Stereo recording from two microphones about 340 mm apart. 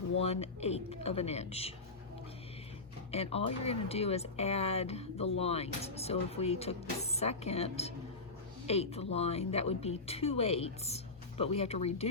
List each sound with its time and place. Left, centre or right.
0.2 s speech: centre
3.1 s speech: centre